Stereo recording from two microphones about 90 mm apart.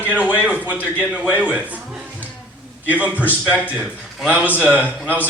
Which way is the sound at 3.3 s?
15° right (ahead or behind).